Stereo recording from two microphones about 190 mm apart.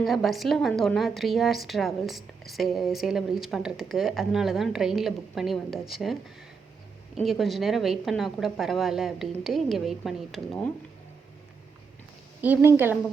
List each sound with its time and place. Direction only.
0.0 s a woman's voice: centre (ahead or behind)
7.2 s a woman's voice: centre (ahead or behind)
12.4 s a woman's voice: 10° right (ahead or behind)